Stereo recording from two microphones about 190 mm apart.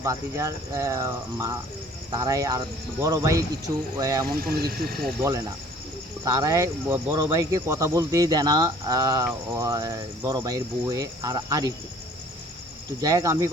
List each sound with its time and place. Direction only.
0.0 s speech: 15° right (ahead or behind)
4.4 s speech: 50° right (ahead or behind)
6.2 s speech: 20° right (ahead or behind)
13.0 s speech: 20° right (ahead or behind)